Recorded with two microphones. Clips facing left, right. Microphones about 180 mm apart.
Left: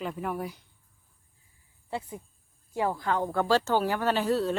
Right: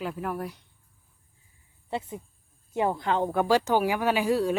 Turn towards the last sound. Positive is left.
turn(degrees=-10)  # may be behind; listen again after turning